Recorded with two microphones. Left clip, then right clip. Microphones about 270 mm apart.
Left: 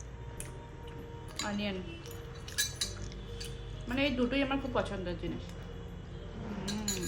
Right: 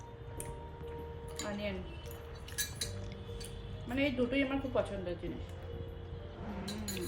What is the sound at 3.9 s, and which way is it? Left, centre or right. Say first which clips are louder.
A woman's voice: left 1 dB; centre.